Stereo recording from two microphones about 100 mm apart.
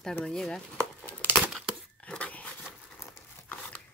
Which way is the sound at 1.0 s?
15° left (ahead or behind).